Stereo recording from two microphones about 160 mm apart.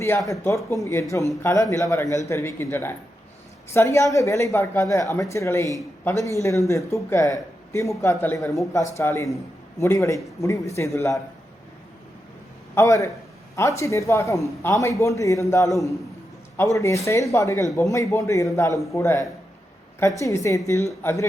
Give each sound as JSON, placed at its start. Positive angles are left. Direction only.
{"t": 0.0, "sound": "speech", "side_deg": 20}
{"t": 12.7, "sound": "speech", "side_deg": 20}